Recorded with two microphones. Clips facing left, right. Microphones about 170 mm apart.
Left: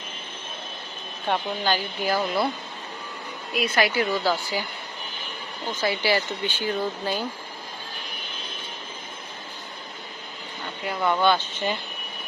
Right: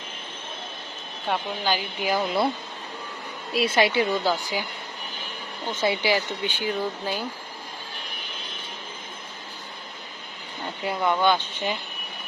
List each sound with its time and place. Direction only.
1.3 s speech: 10° right (ahead or behind)
3.5 s a woman's voice: 30° right (ahead or behind)
5.7 s speech: 25° right (ahead or behind)
11.0 s speech: 10° right (ahead or behind)